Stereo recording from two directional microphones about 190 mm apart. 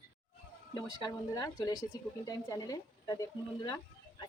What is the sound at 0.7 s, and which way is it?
Speech, 20° left (ahead or behind).